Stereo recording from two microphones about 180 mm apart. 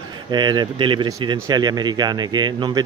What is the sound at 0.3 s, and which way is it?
Speech, 25° right (ahead or behind).